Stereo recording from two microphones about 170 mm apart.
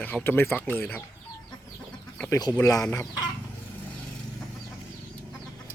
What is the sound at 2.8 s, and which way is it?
Speech, 15° left (ahead or behind).